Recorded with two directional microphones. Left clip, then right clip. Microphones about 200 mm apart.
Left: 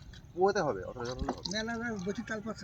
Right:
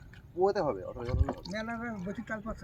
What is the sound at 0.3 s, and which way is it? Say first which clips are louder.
Speech: even; 15° left (ahead or behind).